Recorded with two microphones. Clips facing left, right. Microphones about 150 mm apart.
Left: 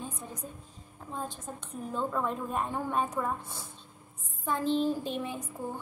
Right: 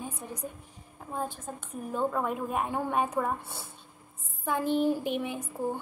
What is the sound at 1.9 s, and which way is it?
A woman's voice, 10° right (ahead or behind).